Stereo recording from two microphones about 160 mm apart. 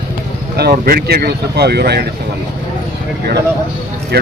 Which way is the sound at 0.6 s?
65° right (ahead or behind).